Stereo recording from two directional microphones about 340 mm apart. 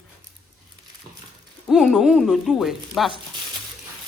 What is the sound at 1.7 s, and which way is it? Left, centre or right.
Speech, centre.